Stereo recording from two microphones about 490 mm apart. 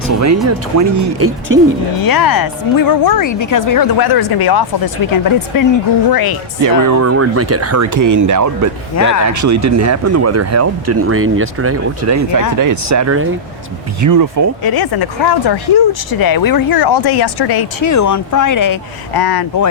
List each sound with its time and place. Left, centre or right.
0.1 s speech: right
1.5 s speech: right
2.0 s speech: left
6.6 s speech: right
14.6 s speech: left
17.8 s speech: left